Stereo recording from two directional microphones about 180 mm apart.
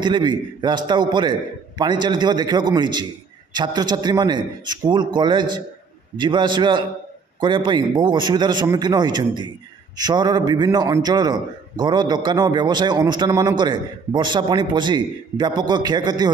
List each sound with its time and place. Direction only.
0.0 s a man's voice: 25° right (ahead or behind)